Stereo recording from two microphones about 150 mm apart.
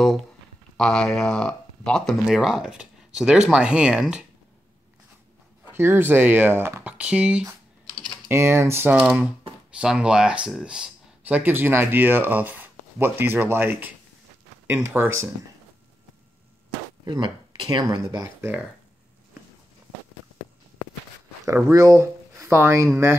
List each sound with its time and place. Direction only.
0.7 s speech: 5° left (ahead or behind)
5.7 s speech: 15° right (ahead or behind)
9.0 s speech: 5° right (ahead or behind)
15.0 s speech: 15° right (ahead or behind)
17.0 s speech: 30° right (ahead or behind)
21.5 s speech: 20° right (ahead or behind)